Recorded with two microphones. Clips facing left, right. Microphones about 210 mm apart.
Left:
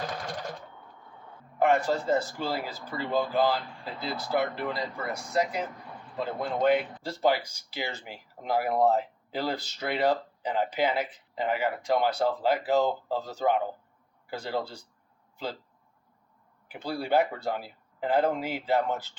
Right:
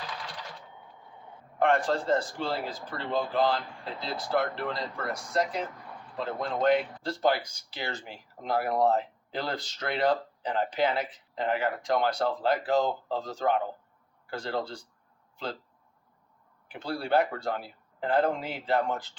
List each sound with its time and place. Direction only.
0.0 s sewing machine: 45° left (ahead or behind)
0.7 s a sound: 15° right (ahead or behind)
1.5 s speech: 5° left (ahead or behind)
16.7 s speech: 5° left (ahead or behind)